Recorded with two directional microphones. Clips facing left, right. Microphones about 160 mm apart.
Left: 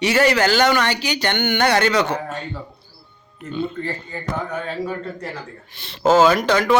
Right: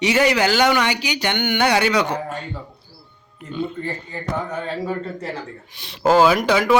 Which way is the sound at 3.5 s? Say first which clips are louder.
Left 1 dB; 10° right (ahead or behind).